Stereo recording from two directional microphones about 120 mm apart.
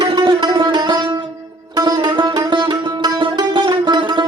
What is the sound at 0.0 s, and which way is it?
Music, 40° right (ahead or behind).